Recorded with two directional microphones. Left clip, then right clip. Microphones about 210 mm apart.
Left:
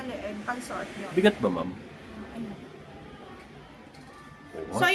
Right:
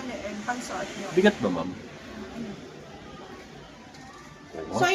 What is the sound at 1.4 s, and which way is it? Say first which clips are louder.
Speech: even; 5° left (ahead or behind).